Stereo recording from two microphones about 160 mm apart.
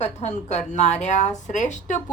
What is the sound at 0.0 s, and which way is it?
Speech, 45° left (ahead or behind).